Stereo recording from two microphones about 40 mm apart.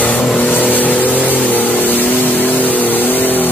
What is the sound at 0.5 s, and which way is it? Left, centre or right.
Vehicle, left.